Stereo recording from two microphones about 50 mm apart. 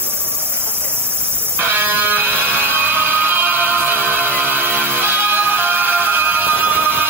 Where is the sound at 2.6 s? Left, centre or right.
Right.